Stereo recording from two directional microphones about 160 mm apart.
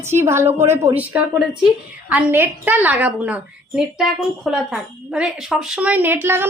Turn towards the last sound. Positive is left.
turn(degrees=-15)  # may be behind; listen again after turning